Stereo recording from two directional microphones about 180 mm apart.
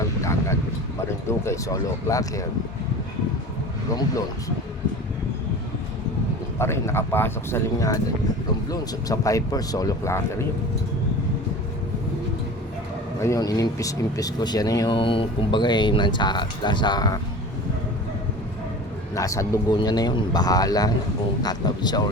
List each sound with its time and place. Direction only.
0.2 s a sound: 15° left (ahead or behind)
1.3 s speech: 15° left (ahead or behind)
3.9 s speech: 20° left (ahead or behind)
6.6 s speech: 15° left (ahead or behind)
13.2 s speech: 20° left (ahead or behind)
19.1 s speech: 15° left (ahead or behind)